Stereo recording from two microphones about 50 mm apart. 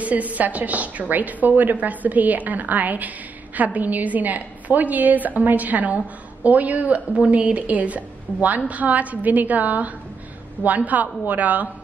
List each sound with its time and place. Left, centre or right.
0.0 s a woman's voice: right